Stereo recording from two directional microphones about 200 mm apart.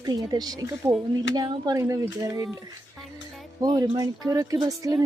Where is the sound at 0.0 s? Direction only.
20° right (ahead or behind).